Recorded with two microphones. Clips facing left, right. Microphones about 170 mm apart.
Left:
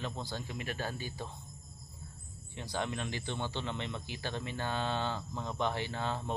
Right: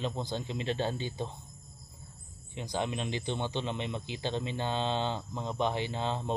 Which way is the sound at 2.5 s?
15° right (ahead or behind).